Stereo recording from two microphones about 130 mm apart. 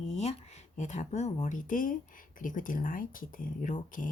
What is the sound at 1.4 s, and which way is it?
Speech, 80° left.